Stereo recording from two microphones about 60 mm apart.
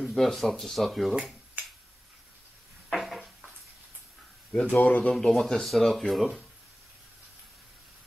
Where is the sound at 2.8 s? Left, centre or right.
Centre.